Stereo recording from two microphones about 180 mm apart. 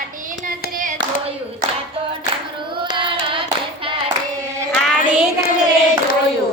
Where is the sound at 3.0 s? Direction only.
30° right (ahead or behind).